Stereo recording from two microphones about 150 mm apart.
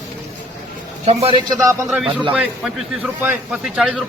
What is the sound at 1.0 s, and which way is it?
Speech, 40° right (ahead or behind).